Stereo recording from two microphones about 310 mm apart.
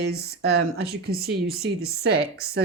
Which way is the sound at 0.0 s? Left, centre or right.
Right.